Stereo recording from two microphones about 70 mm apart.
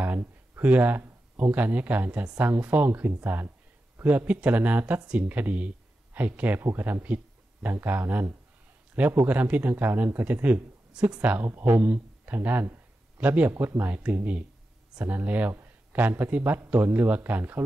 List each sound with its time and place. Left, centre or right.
0.0 s a sound: right
1.3 s speech: right
2.9 s speech: right
6.6 s speech: right
6.9 s speech: right